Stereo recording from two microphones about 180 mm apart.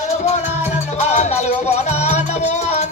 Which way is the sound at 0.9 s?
40° left (ahead or behind).